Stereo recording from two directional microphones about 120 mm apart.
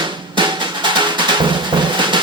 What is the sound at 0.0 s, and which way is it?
Drum, 40° right (ahead or behind).